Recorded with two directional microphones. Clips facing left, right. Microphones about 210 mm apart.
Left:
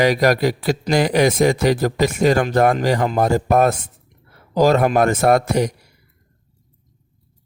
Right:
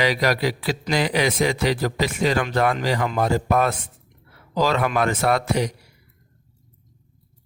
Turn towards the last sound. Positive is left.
turn(degrees=45)  # may be behind; listen again after turning